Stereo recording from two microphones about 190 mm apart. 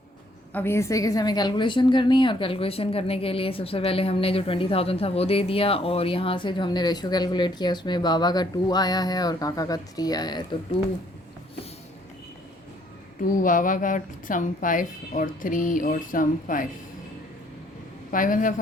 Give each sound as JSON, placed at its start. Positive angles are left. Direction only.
{"t": 0.5, "sound": "a woman's voice", "side_deg": 10}
{"t": 13.2, "sound": "a woman's voice", "side_deg": 45}
{"t": 18.1, "sound": "a woman's voice", "side_deg": 45}